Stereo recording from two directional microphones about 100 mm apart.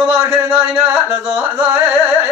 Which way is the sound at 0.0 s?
25° right (ahead or behind).